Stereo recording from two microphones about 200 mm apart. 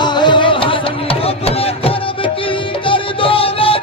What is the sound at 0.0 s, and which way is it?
Music, 20° left (ahead or behind).